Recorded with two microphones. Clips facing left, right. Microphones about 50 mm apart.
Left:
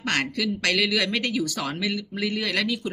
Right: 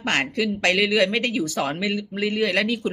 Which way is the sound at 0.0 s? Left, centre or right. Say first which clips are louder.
Right 3 dB; right.